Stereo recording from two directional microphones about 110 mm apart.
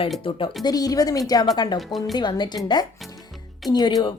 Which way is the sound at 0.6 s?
35° left (ahead or behind).